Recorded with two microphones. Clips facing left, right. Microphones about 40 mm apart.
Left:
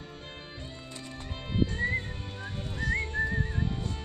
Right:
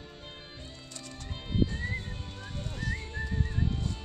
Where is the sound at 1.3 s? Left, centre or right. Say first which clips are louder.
Even; centre.